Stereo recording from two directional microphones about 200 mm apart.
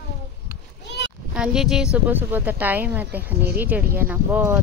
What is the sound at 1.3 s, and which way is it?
A woman's voice, 5° right (ahead or behind).